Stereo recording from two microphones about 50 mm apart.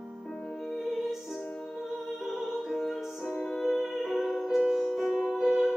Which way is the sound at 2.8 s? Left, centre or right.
Centre.